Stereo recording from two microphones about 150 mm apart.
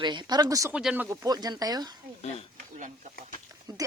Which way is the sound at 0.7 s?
5° right (ahead or behind).